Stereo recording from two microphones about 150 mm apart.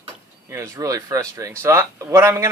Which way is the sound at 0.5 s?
20° right (ahead or behind).